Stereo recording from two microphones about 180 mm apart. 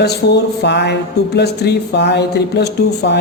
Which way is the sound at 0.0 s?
65° left (ahead or behind).